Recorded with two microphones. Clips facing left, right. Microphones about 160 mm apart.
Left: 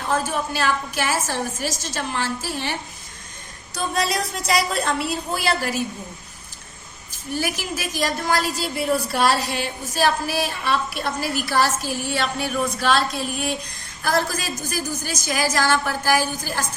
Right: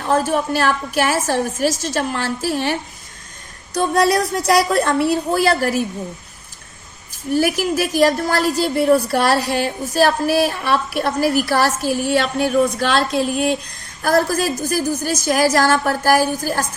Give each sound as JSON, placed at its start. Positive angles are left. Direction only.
{"t": 0.3, "sound": "a woman's voice", "side_deg": -55}
{"t": 3.9, "sound": "a woman's voice", "side_deg": -65}
{"t": 7.3, "sound": "a woman's voice", "side_deg": -60}